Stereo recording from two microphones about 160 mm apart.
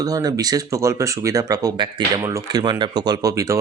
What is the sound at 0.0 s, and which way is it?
Speech, 25° right (ahead or behind).